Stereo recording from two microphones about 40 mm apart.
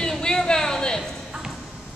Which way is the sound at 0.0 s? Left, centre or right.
Centre.